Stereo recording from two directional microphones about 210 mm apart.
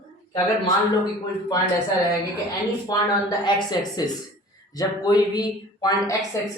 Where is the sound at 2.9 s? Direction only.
15° left (ahead or behind).